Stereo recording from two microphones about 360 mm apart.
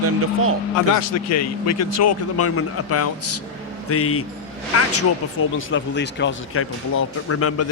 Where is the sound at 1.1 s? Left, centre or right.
Left.